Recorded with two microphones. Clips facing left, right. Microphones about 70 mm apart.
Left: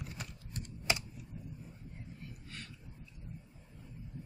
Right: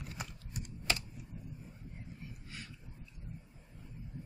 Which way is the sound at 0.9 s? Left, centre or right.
Centre.